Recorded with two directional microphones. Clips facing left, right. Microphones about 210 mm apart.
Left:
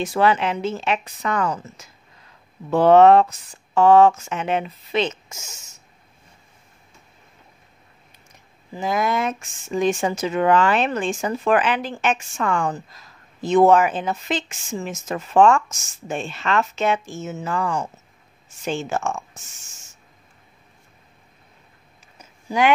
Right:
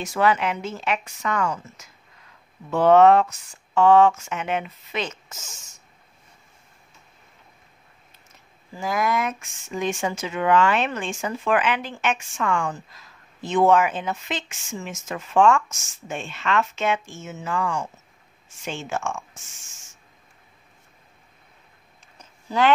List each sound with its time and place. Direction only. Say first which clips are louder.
0.0 s a woman's voice: left 2 dB; 30° left (ahead or behind)
5.3 s speech: left 2 dB; 10° left (ahead or behind)
8.3 s speech: left 5 dB; 20° left (ahead or behind); by 19.2 s 40° left (ahead or behind)
22.2 s a sound: left 1 dB; 15° left (ahead or behind)